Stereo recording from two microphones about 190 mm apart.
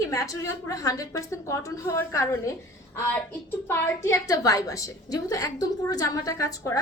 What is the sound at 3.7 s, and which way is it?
A woman's voice, 15° left (ahead or behind).